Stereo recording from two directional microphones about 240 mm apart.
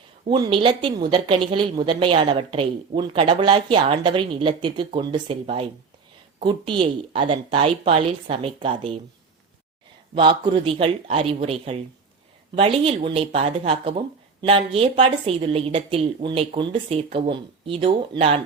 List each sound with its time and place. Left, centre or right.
0.3 s speech: centre
10.2 s speech: centre